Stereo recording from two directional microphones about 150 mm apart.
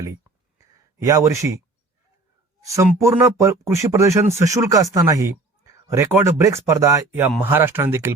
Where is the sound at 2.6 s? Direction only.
20° right (ahead or behind).